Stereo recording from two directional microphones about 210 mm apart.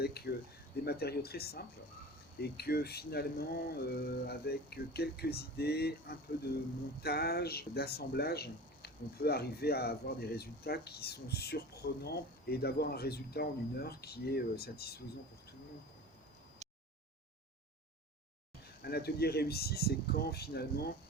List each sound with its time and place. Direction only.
0.0 s speech: 50° left (ahead or behind)
16.6 s a sound: 30° right (ahead or behind)
18.8 s speech: 50° left (ahead or behind)